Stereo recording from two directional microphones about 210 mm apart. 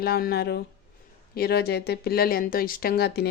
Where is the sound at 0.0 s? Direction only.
45° left (ahead or behind).